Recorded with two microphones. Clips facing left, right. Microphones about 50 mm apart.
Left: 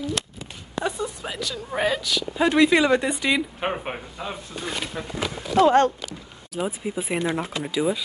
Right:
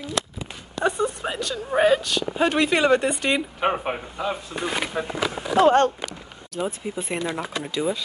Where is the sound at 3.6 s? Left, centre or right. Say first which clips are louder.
Right 4 dB; right.